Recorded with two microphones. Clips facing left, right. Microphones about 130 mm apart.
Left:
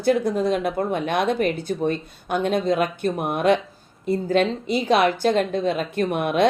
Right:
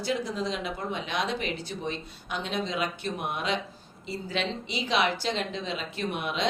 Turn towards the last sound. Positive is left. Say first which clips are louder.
# left 10 dB
turn(degrees=55)  # may be behind; listen again after turning